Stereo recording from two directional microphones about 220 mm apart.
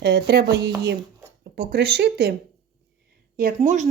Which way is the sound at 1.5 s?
50° right (ahead or behind).